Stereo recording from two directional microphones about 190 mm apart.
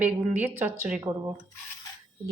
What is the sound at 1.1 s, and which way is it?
Speech, 20° right (ahead or behind).